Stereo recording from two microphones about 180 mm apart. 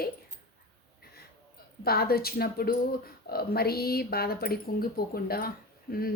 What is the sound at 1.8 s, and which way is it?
A woman's voice, 60° left (ahead or behind).